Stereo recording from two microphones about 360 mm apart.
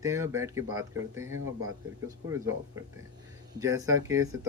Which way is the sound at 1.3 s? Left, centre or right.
Right.